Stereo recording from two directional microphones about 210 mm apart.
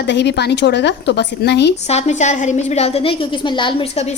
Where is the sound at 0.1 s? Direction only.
55° left (ahead or behind).